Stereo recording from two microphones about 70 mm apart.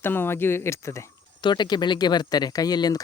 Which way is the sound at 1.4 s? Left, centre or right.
Left.